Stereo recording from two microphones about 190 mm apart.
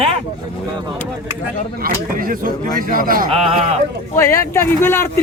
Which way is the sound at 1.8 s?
50° right (ahead or behind).